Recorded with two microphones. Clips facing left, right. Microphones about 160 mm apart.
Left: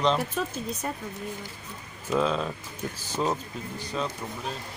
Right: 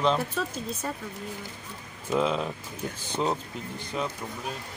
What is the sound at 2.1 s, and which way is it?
Speech, 15° right (ahead or behind).